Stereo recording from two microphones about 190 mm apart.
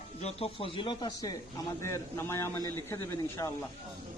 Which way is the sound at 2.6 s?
20° right (ahead or behind).